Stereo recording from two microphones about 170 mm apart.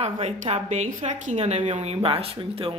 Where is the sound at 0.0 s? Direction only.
40° right (ahead or behind).